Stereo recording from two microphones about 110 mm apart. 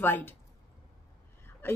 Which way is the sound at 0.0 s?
20° left (ahead or behind).